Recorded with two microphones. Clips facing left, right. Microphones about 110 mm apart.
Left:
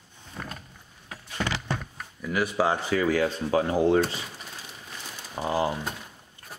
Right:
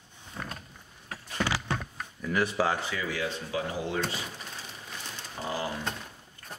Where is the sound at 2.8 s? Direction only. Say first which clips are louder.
Left 9 dB; 45° left (ahead or behind).